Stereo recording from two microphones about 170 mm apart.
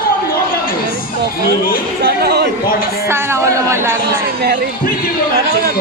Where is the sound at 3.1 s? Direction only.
15° right (ahead or behind).